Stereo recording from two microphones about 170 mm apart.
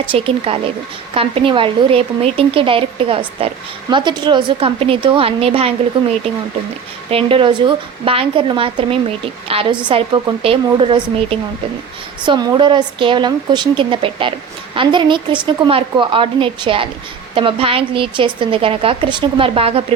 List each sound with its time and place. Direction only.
0.0 s speech: 30° right (ahead or behind)
7.1 s a woman's voice: 35° right (ahead or behind)